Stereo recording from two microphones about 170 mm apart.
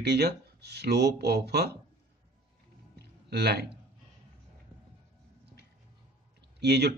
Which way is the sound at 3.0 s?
75° right (ahead or behind).